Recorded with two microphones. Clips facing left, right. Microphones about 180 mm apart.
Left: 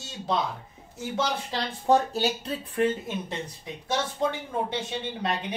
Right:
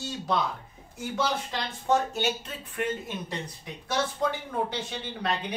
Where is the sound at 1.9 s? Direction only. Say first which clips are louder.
Left 3 dB; 35° left (ahead or behind).